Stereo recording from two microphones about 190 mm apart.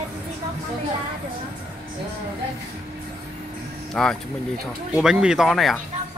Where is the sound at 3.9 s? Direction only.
5° left (ahead or behind).